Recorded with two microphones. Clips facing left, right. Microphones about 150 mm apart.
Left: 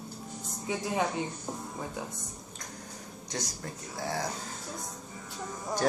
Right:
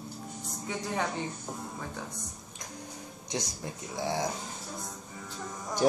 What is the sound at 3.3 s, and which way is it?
Speech, 15° right (ahead or behind).